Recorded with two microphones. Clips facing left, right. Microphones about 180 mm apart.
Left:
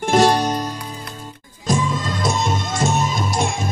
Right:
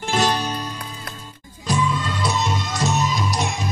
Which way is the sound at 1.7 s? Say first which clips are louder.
Left 2 dB; 40° left (ahead or behind).